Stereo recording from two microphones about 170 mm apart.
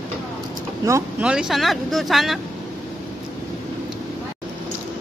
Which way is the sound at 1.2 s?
5° right (ahead or behind).